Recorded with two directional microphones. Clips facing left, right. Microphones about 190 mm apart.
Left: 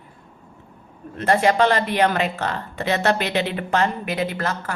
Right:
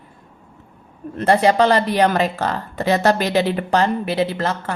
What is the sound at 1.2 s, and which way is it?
Speech, 35° right (ahead or behind).